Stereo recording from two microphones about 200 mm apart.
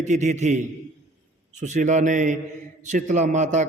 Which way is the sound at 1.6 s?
40° right (ahead or behind).